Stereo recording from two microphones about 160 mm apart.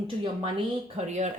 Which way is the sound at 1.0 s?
45° right (ahead or behind).